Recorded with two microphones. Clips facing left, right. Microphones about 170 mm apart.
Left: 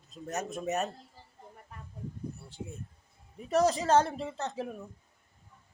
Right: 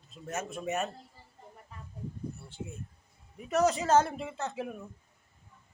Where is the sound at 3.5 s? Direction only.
35° left (ahead or behind).